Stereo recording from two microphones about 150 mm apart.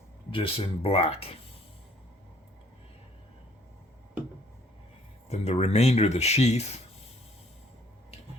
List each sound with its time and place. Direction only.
0.3 s speech: 35° left (ahead or behind)
5.3 s speech: 45° left (ahead or behind)